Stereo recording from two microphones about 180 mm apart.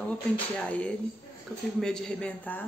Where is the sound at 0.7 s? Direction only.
5° left (ahead or behind).